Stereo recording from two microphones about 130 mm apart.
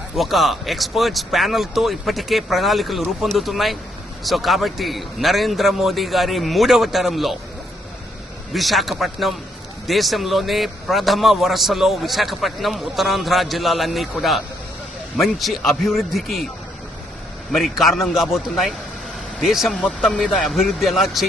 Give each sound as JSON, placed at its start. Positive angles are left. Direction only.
{"t": 0.2, "sound": "a man's voice", "side_deg": 0}
{"t": 8.5, "sound": "a man's voice", "side_deg": 0}
{"t": 17.5, "sound": "a man's voice", "side_deg": 0}